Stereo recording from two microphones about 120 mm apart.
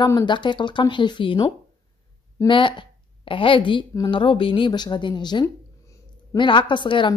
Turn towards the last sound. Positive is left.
turn(degrees=40)  # may be behind; listen again after turning